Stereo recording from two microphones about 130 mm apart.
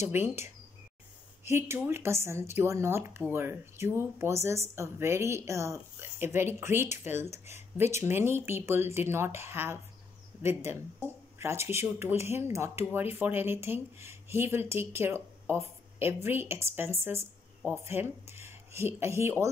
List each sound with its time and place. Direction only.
0.0 s speech: 20° right (ahead or behind)